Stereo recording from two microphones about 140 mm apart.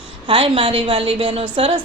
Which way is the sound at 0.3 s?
40° right (ahead or behind).